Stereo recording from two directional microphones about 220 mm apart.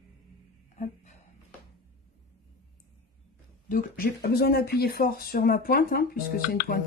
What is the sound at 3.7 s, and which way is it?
Speech, 40° left (ahead or behind).